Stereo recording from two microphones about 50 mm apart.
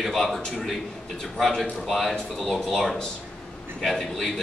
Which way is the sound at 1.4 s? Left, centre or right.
Centre.